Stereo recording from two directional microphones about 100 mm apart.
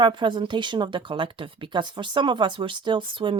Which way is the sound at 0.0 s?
55° right (ahead or behind).